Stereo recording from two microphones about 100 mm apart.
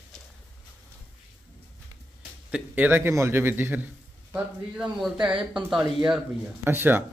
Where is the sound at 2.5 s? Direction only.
15° right (ahead or behind).